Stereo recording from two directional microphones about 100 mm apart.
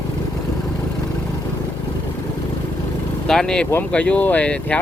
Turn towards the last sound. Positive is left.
turn(degrees=10)  # may be behind; listen again after turning